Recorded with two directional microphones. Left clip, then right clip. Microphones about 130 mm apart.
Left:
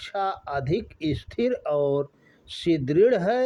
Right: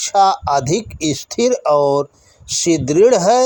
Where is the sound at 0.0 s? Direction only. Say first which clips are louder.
Right 15 dB; 25° right (ahead or behind).